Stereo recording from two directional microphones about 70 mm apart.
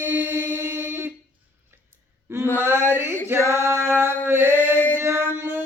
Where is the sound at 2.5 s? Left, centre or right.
Right.